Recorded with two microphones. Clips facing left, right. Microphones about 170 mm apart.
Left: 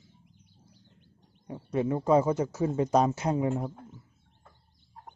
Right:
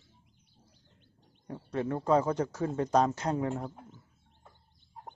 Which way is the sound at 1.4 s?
10° left (ahead or behind).